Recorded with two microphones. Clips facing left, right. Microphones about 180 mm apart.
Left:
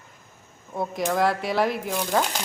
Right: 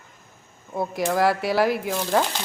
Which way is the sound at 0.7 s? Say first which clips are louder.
Right 2 dB; 5° right (ahead or behind).